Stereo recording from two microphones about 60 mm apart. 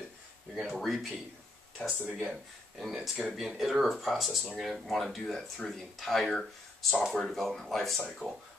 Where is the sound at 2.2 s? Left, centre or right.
Centre.